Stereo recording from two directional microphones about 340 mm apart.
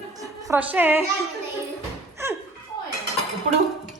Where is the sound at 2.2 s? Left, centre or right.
Centre.